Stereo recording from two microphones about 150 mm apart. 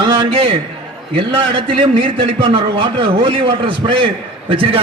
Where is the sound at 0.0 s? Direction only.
30° right (ahead or behind).